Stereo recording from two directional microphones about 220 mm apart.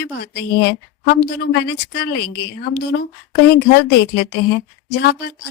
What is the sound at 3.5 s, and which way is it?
Speech, 50° left (ahead or behind).